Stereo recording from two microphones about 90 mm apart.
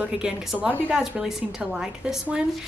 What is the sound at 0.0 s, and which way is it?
A woman's voice, 10° right (ahead or behind).